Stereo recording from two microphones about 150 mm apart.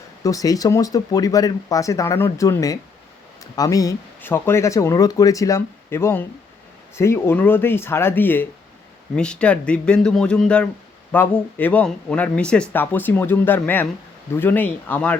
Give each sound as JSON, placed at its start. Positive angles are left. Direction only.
{"t": 0.2, "sound": "speech", "side_deg": 25}